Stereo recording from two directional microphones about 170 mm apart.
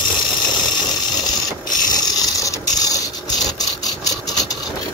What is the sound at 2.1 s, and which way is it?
Printer, 20° left (ahead or behind).